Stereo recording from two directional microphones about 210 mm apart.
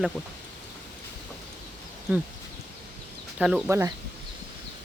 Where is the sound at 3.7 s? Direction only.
10° right (ahead or behind).